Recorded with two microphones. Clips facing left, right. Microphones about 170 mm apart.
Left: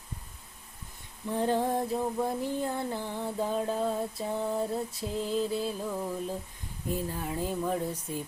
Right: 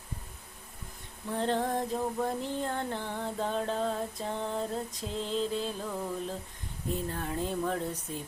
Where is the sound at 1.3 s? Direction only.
10° left (ahead or behind).